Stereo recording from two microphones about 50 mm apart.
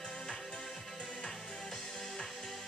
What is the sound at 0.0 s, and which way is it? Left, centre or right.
Music, centre.